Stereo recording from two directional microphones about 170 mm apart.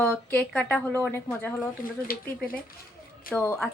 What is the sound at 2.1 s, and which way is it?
Speech, 60° left (ahead or behind).